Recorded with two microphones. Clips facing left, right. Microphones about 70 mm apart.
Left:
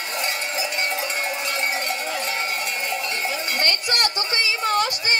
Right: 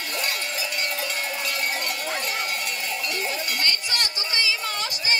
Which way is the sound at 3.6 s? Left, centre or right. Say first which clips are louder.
Left 4 dB; left.